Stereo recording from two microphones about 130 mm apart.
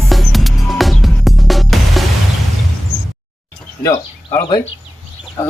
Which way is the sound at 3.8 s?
25° left (ahead or behind).